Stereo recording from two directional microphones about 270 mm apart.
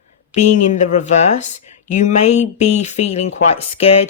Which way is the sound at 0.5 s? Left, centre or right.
Left.